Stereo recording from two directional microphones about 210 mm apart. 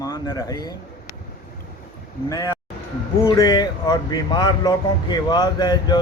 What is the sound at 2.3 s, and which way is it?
A man's voice, 15° left (ahead or behind).